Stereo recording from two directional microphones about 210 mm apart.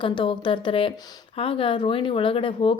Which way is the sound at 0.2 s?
25° left (ahead or behind).